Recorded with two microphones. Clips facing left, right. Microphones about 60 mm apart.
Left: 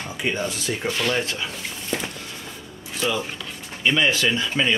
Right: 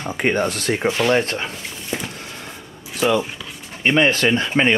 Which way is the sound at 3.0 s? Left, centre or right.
Right.